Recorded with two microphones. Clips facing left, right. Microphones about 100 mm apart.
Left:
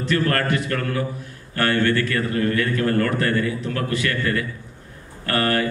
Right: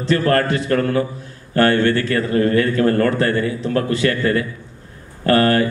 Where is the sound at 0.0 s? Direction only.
30° right (ahead or behind).